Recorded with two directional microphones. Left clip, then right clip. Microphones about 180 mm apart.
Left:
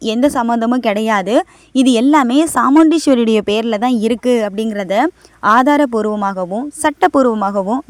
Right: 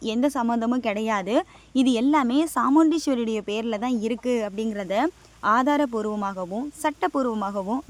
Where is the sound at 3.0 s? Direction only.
45° left (ahead or behind).